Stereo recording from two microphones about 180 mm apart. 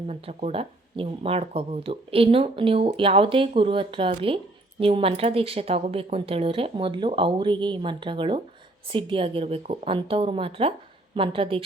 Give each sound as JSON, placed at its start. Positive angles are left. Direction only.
{"t": 0.1, "sound": "speech", "side_deg": -35}